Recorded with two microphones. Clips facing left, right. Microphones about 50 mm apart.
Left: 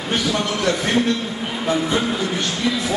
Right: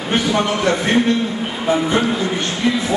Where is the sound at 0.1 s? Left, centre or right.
Right.